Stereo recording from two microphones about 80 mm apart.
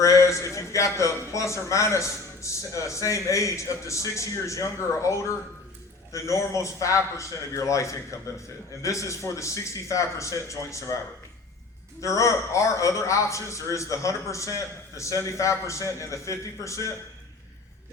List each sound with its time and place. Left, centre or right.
0.0 s a man's voice: left